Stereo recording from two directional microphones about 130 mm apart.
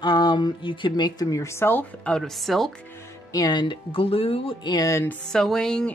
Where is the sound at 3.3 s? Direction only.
35° left (ahead or behind).